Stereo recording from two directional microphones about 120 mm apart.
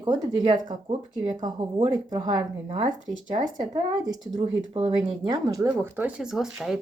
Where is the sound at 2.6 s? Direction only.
55° right (ahead or behind).